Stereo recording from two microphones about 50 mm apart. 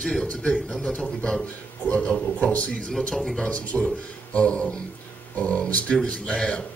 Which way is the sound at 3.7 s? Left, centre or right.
Centre.